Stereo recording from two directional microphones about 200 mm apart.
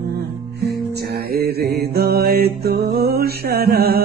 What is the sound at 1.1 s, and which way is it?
Mantra, 50° right (ahead or behind).